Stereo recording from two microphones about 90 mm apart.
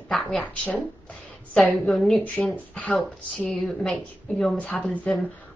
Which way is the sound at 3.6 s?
5° left (ahead or behind).